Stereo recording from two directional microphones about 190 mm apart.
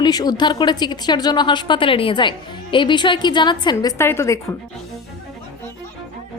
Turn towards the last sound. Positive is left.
turn(degrees=15)  # may be behind; listen again after turning